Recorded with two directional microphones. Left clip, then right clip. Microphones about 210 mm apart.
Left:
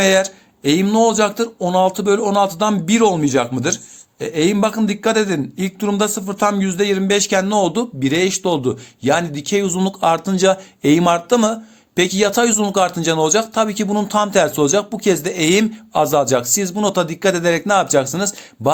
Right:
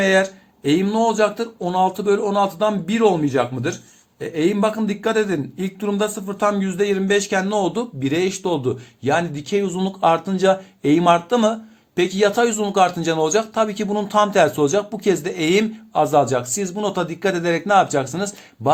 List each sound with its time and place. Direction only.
0.0 s a man's voice: 35° left (ahead or behind); by 18.7 s 20° left (ahead or behind)